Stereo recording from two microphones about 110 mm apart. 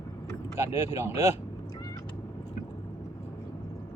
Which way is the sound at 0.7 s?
25° right (ahead or behind).